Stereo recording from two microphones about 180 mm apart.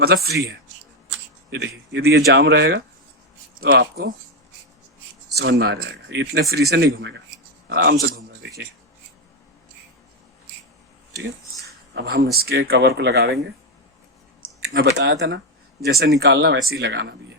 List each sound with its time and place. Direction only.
0.3 s speech: 65° right (ahead or behind)
1.5 s speech: 75° right (ahead or behind)
5.4 s a man's voice: 70° right (ahead or behind)
11.9 s speech: 60° right (ahead or behind)
14.6 s speech: 60° right (ahead or behind)
15.8 s speech: 60° right (ahead or behind)